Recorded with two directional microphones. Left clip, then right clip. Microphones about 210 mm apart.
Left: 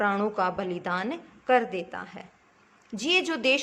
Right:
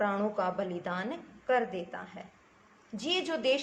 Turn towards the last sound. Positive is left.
turn(degrees=50)  # may be behind; listen again after turning